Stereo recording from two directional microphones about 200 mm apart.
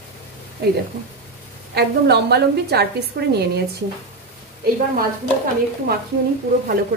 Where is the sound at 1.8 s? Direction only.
55° right (ahead or behind).